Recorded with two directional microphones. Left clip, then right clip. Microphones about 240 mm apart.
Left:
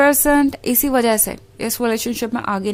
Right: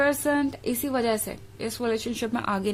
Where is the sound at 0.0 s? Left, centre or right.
Left.